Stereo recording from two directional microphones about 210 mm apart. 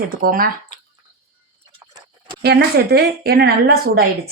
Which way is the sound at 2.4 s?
50° right (ahead or behind).